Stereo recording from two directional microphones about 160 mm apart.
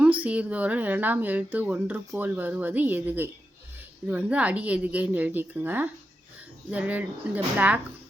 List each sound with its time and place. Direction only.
0.0 s speech: 10° right (ahead or behind)